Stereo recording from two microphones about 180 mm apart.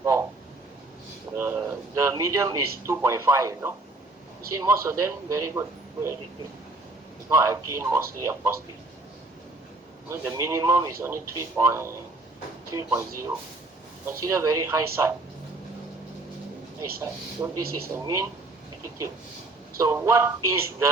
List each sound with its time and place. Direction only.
0.0 s a sound: 15° right (ahead or behind)
1.4 s speech: 15° right (ahead or behind)
7.3 s speech: 15° right (ahead or behind)
10.1 s speech: 15° right (ahead or behind)
14.1 s speech: 15° right (ahead or behind)
17.0 s speech: 15° right (ahead or behind)
19.8 s speech: 15° right (ahead or behind)